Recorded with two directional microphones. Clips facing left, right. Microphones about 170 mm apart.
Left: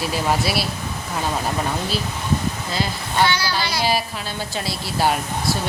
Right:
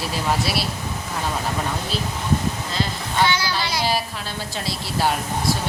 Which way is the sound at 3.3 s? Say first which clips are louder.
Even; 20° right (ahead or behind).